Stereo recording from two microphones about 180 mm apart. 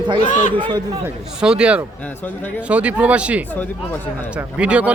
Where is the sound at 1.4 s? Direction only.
5° right (ahead or behind).